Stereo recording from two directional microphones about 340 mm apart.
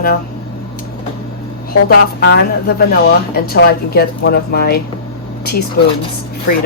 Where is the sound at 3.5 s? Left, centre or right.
Left.